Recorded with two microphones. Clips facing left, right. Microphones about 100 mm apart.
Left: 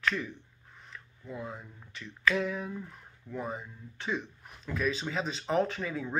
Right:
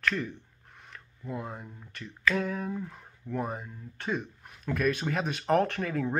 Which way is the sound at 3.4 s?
50° right (ahead or behind).